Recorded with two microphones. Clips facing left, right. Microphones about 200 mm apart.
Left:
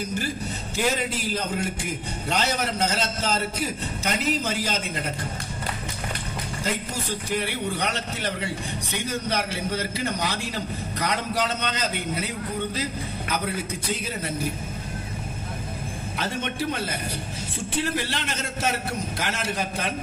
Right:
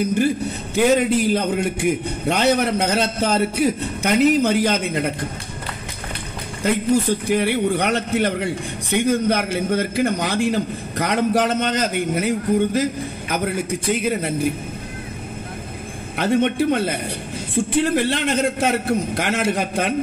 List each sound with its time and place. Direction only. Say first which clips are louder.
0.7 s a man's voice: right 10 dB; 60° right (ahead or behind)
7.2 s a man's voice: right 9 dB; 60° right (ahead or behind)
16.2 s a man's voice: right 11 dB; 60° right (ahead or behind)